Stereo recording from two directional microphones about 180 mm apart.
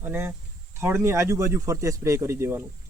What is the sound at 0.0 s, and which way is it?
Speech, 10° right (ahead or behind).